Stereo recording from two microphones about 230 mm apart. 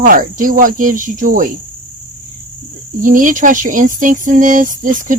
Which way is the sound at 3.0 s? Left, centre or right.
Right.